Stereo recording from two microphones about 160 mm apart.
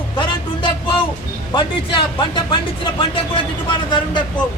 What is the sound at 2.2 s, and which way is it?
Speech, 30° left (ahead or behind).